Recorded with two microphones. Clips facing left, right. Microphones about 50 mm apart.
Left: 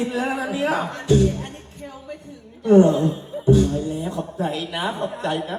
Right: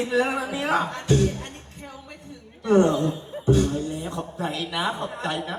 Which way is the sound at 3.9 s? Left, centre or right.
Right.